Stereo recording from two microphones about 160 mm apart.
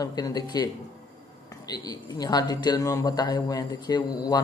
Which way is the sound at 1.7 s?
25° left (ahead or behind).